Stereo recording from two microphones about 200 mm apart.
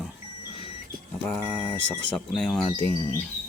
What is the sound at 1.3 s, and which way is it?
Speech, 5° left (ahead or behind).